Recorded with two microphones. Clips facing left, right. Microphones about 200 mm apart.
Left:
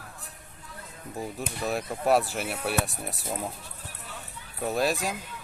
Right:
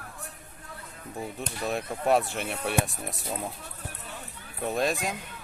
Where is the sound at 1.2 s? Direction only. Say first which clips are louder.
Left 1 dB; centre (ahead or behind).